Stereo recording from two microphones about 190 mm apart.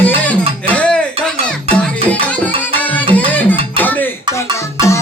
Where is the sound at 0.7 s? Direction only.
5° left (ahead or behind).